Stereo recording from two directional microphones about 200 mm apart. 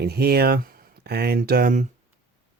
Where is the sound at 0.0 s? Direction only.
50° right (ahead or behind).